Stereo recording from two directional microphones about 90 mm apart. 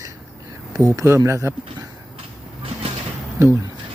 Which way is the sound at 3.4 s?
35° right (ahead or behind).